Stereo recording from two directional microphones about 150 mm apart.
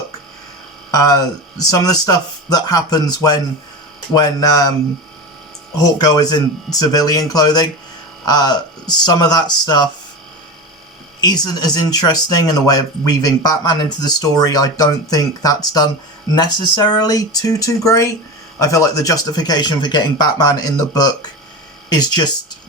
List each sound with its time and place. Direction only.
0.9 s speech: 25° left (ahead or behind)
5.7 s speech: 25° left (ahead or behind)
11.2 s speech: 25° left (ahead or behind)